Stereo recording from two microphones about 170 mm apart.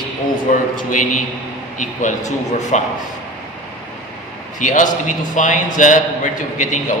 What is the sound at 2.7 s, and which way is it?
Speech, 45° left (ahead or behind).